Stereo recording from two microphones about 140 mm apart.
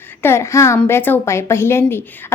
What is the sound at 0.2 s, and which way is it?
A woman's voice, 20° left (ahead or behind).